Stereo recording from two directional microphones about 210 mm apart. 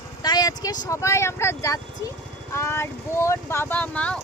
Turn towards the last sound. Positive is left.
turn(degrees=5)  # may be behind; listen again after turning